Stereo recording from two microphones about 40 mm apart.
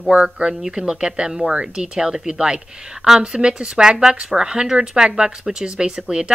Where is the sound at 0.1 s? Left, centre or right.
Right.